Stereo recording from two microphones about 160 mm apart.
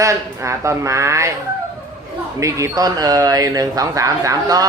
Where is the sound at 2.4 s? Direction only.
20° right (ahead or behind).